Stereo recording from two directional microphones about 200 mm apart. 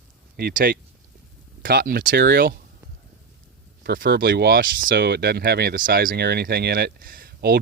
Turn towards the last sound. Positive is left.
turn(degrees=-45)  # may be behind; listen again after turning